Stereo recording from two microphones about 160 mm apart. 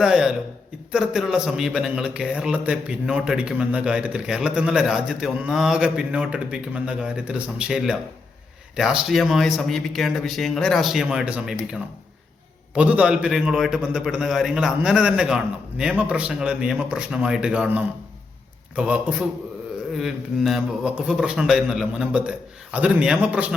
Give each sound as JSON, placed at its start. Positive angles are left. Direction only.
{"t": 0.0, "sound": "a man's voice", "side_deg": -5}